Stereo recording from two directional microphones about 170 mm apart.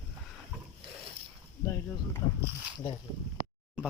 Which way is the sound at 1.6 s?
15° left (ahead or behind).